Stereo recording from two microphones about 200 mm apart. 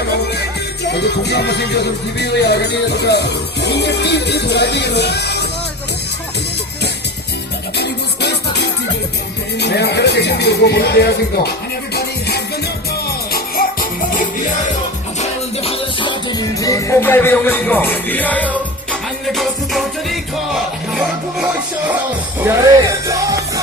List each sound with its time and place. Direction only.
0.9 s music: 55° left (ahead or behind)
7.8 s music: 55° left (ahead or behind)
13.1 s music: 50° left (ahead or behind)
15.2 s music: 30° left (ahead or behind); by 20.1 s centre (ahead or behind)
22.5 s speech: 10° right (ahead or behind)